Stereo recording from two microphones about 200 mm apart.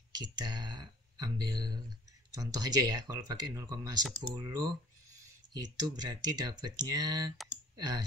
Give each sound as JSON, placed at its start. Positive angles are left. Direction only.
{"t": 0.1, "sound": "speech", "side_deg": -20}